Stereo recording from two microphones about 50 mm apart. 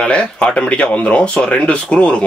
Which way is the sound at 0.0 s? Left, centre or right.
Centre.